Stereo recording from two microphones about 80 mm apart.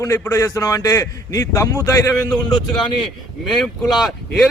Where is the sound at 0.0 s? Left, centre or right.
Left.